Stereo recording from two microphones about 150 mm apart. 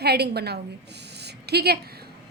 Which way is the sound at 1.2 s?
90° right.